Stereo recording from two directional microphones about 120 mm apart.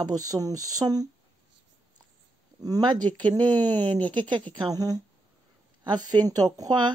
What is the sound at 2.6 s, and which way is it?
Speech, 35° right (ahead or behind).